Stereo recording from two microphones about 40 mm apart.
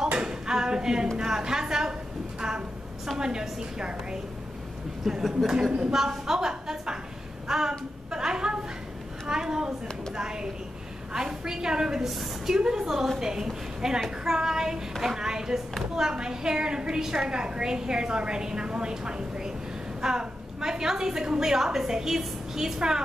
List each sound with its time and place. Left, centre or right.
0.2 s a sound: centre
3.2 s a woman's voice: centre
5.1 s a woman's voice: centre
7.4 s a sound: centre
11.1 s a woman's voice: centre
12.0 s a woman's voice: centre